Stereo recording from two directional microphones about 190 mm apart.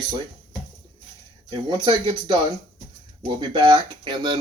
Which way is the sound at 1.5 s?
25° right (ahead or behind).